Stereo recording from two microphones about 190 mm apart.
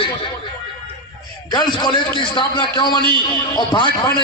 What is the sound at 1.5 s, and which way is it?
A man's voice, 25° left (ahead or behind).